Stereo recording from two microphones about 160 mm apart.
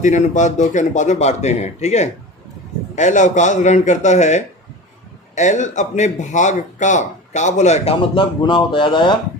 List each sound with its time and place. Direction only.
0.0 s speech: 50° left (ahead or behind); by 9.1 s 30° left (ahead or behind)